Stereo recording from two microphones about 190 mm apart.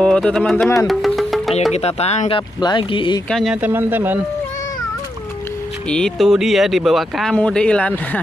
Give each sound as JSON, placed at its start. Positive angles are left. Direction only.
{"t": 0.0, "sound": "speech", "side_deg": 5}
{"t": 0.8, "sound": "music", "side_deg": 0}
{"t": 1.7, "sound": "speech", "side_deg": 35}
{"t": 3.3, "sound": "speech", "side_deg": 0}
{"t": 3.6, "sound": "speech", "side_deg": -10}
{"t": 5.9, "sound": "speech", "side_deg": 5}